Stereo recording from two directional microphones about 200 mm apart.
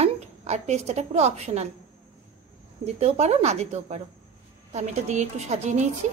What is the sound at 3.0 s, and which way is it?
Speech, 30° right (ahead or behind).